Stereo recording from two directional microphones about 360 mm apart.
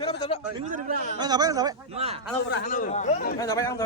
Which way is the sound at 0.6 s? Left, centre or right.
Right.